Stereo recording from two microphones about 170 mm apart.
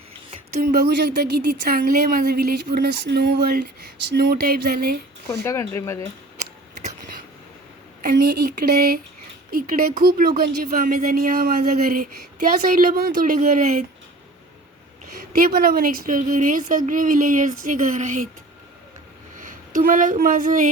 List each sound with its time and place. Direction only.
0.8 s speech: 70° right (ahead or behind)
5.3 s speech: 15° left (ahead or behind)
8.0 s speech: 60° right (ahead or behind)
15.1 s a woman's voice: 60° right (ahead or behind)
19.4 s speech: 50° right (ahead or behind)